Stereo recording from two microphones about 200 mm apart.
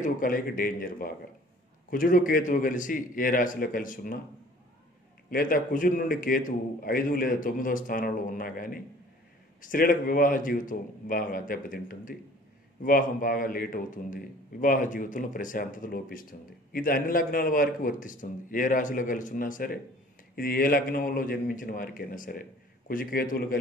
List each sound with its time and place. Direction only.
0.0 s a man's voice: 45° left (ahead or behind)
5.3 s a man's voice: 45° left (ahead or behind)